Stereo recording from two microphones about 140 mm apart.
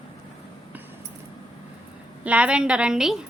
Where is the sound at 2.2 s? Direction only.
10° right (ahead or behind).